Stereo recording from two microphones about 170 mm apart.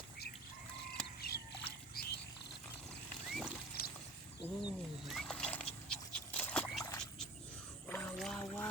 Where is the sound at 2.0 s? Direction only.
65° left (ahead or behind).